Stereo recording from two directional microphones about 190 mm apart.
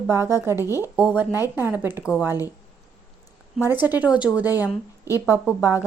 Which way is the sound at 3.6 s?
10° right (ahead or behind).